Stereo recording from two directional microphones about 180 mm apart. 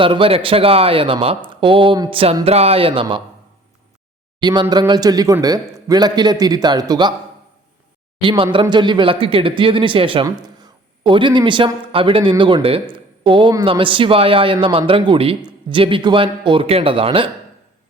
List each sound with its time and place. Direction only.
0.0 s speech: 30° right (ahead or behind)
4.4 s speech: 25° right (ahead or behind)
8.2 s speech: 30° right (ahead or behind)